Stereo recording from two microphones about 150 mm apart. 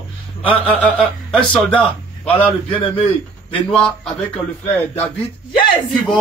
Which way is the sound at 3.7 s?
5° left (ahead or behind).